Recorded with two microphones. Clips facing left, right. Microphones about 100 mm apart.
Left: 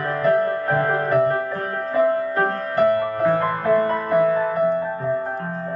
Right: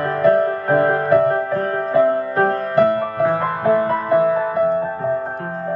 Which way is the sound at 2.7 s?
30° right (ahead or behind).